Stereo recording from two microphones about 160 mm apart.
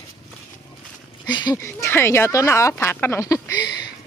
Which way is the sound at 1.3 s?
30° left (ahead or behind).